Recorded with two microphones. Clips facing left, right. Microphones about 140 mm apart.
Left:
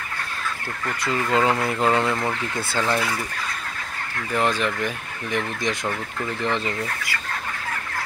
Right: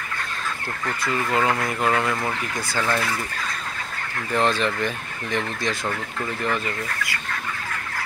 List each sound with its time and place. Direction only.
1.0 s speech: 20° left (ahead or behind)
4.3 s speech: 10° left (ahead or behind)